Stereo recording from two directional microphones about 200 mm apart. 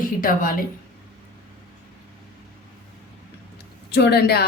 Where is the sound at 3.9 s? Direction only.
55° left (ahead or behind).